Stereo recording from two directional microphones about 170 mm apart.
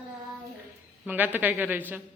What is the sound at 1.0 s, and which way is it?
Speech, 10° right (ahead or behind).